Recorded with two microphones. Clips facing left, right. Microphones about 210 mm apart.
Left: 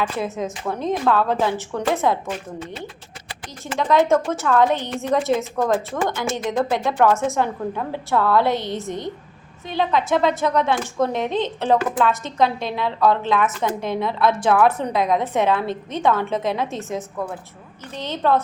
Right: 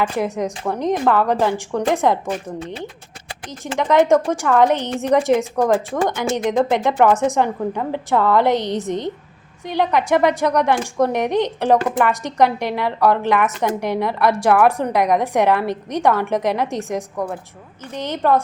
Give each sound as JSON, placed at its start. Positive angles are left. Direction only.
{"t": 0.0, "sound": "speech", "side_deg": -15}
{"t": 3.7, "sound": "speech", "side_deg": -20}